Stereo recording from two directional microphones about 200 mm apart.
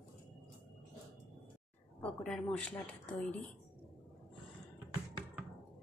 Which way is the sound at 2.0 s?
5° left (ahead or behind).